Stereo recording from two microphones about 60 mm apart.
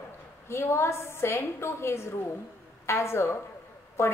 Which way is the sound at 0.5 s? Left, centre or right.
Left.